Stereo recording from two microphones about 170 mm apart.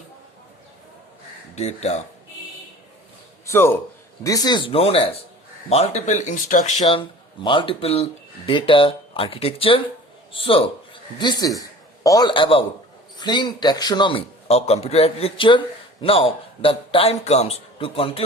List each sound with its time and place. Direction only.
1.5 s a man's voice: 40° left (ahead or behind)
3.4 s a man's voice: 15° left (ahead or behind); by 6.8 s 50° left (ahead or behind)
6.8 s a man's voice: 30° left (ahead or behind)